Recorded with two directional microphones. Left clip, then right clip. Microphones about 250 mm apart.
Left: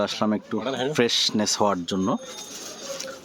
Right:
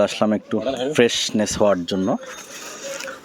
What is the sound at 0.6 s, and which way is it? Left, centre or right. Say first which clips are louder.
Speech: right 1 dB; left.